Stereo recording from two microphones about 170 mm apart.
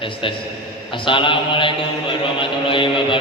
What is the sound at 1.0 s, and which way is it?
Mantra, 30° left (ahead or behind).